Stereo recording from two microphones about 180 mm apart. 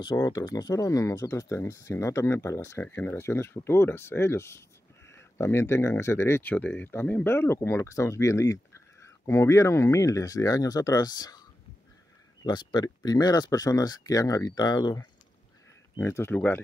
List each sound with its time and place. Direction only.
0.0 s speech: 20° left (ahead or behind)
12.4 s speech: 25° left (ahead or behind)
16.0 s speech: 15° left (ahead or behind)